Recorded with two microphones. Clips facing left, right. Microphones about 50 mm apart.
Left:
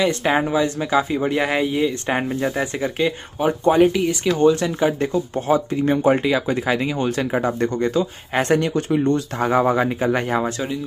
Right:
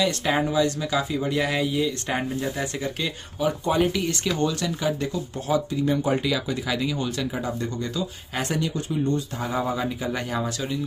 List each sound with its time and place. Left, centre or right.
0.0 s speech: left
3.8 s speech: centre
4.4 s speech: left